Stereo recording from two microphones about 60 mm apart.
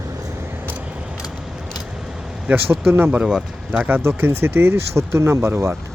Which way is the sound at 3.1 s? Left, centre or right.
Centre.